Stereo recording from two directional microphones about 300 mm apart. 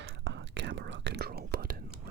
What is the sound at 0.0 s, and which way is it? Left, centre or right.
Whispering, right.